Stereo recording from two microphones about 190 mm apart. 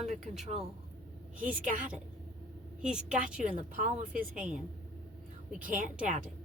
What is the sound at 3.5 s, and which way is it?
Speech, 40° right (ahead or behind).